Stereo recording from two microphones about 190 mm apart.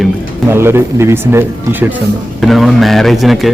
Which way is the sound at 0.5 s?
10° right (ahead or behind).